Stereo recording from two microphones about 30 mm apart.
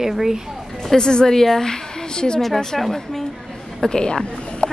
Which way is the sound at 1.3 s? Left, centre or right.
Centre.